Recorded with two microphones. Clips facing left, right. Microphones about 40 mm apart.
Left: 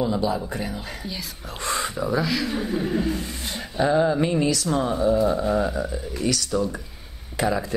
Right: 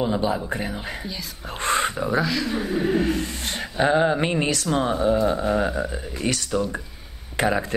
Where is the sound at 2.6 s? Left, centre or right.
Right.